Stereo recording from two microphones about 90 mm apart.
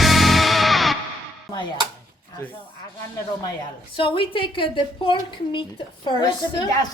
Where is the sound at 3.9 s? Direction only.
80° left.